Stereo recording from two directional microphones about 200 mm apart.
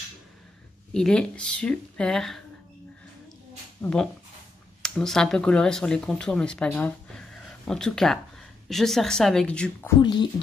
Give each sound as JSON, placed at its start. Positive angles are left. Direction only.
{"t": 0.9, "sound": "speech", "side_deg": 5}
{"t": 3.8, "sound": "speech", "side_deg": 5}
{"t": 9.9, "sound": "speech", "side_deg": 25}